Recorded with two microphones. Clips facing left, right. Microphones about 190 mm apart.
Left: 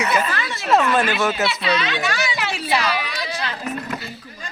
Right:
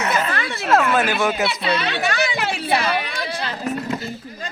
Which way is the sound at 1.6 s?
55° right (ahead or behind).